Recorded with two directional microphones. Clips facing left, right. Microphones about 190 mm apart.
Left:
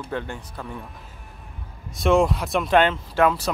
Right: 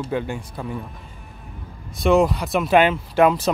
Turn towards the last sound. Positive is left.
turn(degrees=-20)  # may be behind; listen again after turning